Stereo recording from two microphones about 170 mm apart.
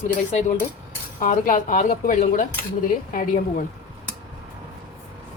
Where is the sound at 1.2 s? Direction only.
50° left (ahead or behind).